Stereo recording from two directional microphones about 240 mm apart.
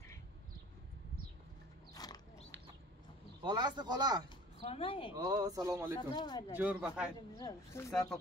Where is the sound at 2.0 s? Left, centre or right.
Centre.